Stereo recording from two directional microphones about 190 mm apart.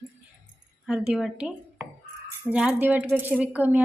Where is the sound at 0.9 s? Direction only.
Centre (ahead or behind).